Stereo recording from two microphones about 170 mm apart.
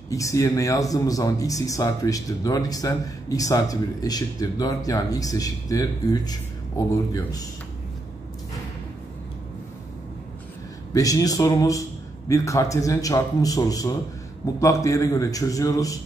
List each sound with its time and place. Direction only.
0.1 s a man's voice: 20° left (ahead or behind)
10.9 s a man's voice: 20° left (ahead or behind)